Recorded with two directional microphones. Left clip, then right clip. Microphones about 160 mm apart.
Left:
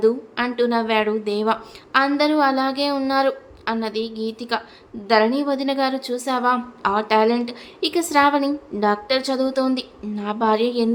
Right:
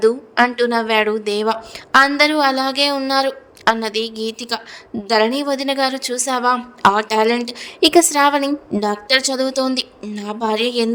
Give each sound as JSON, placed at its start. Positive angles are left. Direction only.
{"t": 0.0, "sound": "a woman's voice", "side_deg": -45}
{"t": 8.7, "sound": "a woman's voice", "side_deg": -30}
{"t": 9.0, "sound": "a woman's voice", "side_deg": -50}